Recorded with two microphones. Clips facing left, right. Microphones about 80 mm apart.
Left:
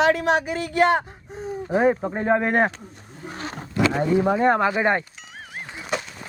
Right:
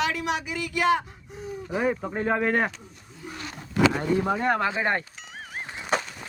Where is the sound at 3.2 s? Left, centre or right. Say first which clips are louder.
Left 4 dB; left.